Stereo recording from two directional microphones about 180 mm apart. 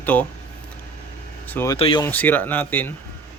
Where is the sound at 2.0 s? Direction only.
10° left (ahead or behind).